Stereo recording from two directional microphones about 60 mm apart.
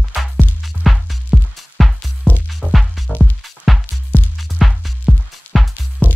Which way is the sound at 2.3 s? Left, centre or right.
Left.